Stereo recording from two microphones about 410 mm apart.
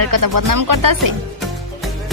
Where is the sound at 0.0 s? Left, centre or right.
Right.